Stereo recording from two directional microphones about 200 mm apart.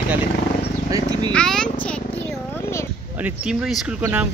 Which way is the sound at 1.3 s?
5° left (ahead or behind).